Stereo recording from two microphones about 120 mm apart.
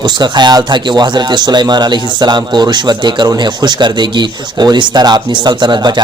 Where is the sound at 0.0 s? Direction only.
40° right (ahead or behind).